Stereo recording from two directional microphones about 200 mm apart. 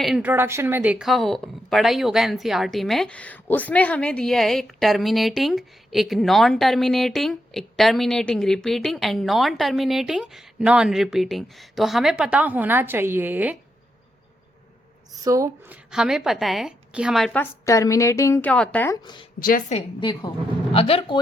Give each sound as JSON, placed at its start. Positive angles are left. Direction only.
{"t": 0.0, "sound": "speech", "side_deg": -5}
{"t": 15.2, "sound": "speech", "side_deg": -15}
{"t": 15.9, "sound": "speech", "side_deg": -5}
{"t": 19.0, "sound": "speech", "side_deg": 25}
{"t": 19.4, "sound": "a woman's voice", "side_deg": 45}
{"t": 20.0, "sound": "speech", "side_deg": 25}